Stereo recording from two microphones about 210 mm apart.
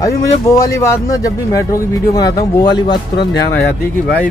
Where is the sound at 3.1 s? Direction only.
50° left (ahead or behind).